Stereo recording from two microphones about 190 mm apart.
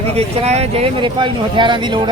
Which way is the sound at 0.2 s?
35° right (ahead or behind).